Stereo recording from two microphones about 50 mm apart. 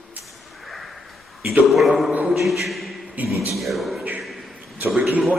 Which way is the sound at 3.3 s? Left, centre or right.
Left.